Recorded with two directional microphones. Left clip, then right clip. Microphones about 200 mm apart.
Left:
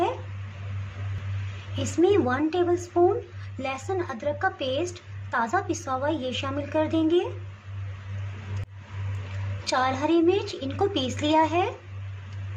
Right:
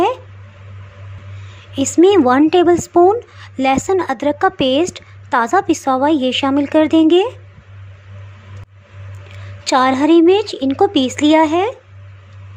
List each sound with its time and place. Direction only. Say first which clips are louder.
1.8 s a woman's voice: right 11 dB; 45° right (ahead or behind)
9.6 s a woman's voice: right 12 dB; 40° right (ahead or behind)